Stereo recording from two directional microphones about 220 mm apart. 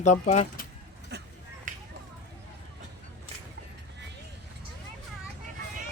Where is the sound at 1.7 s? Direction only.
35° right (ahead or behind).